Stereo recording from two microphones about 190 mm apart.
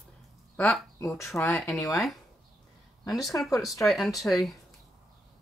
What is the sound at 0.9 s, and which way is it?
Speech, 15° left (ahead or behind).